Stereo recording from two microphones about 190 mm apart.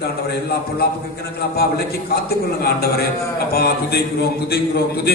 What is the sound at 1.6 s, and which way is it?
A man's voice, 55° left (ahead or behind).